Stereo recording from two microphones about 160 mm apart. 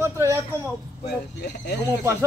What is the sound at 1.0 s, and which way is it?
Speech, 90° left.